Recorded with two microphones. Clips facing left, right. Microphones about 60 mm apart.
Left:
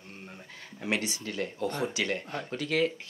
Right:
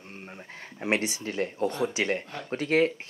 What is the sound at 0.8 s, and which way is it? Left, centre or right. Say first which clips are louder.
Speech: right 4 dB; right.